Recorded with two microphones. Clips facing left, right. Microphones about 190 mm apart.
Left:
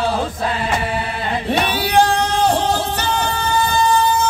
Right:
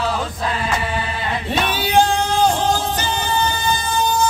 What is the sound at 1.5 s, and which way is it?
Music, 65° left (ahead or behind).